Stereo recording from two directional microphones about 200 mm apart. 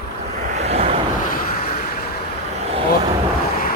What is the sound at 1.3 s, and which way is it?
Vehicle, 50° left (ahead or behind).